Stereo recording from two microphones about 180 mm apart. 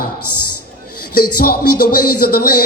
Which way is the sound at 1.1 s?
55° left (ahead or behind).